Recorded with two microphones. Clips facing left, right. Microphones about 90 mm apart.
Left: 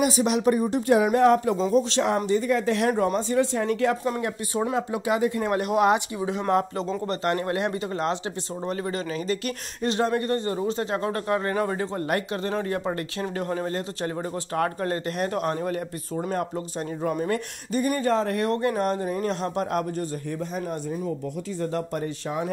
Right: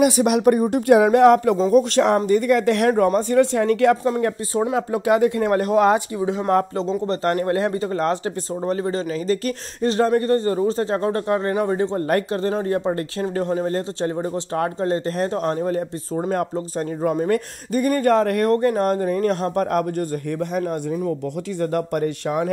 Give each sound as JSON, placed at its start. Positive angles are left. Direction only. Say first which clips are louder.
{"t": 0.0, "sound": "speech", "louder": "right 6 dB", "side_deg": -60}
{"t": 1.7, "sound": "speech", "louder": "right 7 dB", "side_deg": -60}
{"t": 2.4, "sound": "speech", "louder": "right 5 dB", "side_deg": -70}
{"t": 3.2, "sound": "speech", "louder": "right 6 dB", "side_deg": -60}
{"t": 5.0, "sound": "speech", "louder": "right 8 dB", "side_deg": -55}
{"t": 5.6, "sound": "speech", "louder": "right 3 dB", "side_deg": -35}
{"t": 17.3, "sound": "speech", "louder": "right 6 dB", "side_deg": -55}
{"t": 18.5, "sound": "speech", "louder": "right 6 dB", "side_deg": -40}
{"t": 21.5, "sound": "speech", "louder": "right 7 dB", "side_deg": -65}